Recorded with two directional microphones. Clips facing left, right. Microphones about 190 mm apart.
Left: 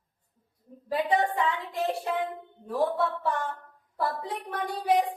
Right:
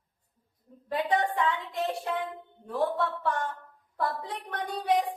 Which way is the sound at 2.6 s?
5° left (ahead or behind).